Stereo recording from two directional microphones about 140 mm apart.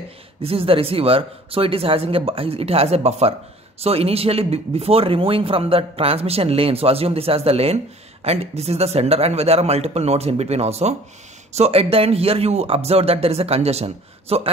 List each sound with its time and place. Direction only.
0.4 s speech: 45° right (ahead or behind)